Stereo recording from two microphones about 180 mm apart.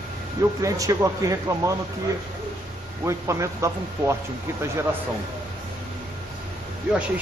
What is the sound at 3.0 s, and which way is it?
A man's voice, 15° right (ahead or behind).